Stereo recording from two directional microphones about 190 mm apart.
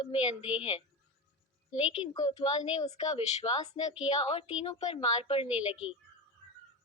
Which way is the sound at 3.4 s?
15° left (ahead or behind).